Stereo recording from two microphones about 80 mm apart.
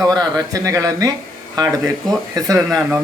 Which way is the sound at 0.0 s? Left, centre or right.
Right.